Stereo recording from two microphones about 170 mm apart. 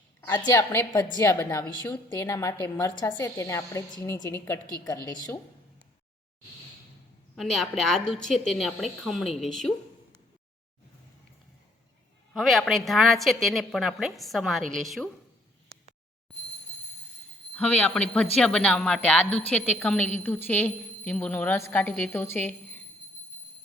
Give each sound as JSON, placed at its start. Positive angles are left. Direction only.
{"t": 0.2, "sound": "a woman's voice", "side_deg": 20}
{"t": 7.3, "sound": "a woman's voice", "side_deg": 0}
{"t": 12.3, "sound": "a woman's voice", "side_deg": 0}
{"t": 17.5, "sound": "a woman's voice", "side_deg": 5}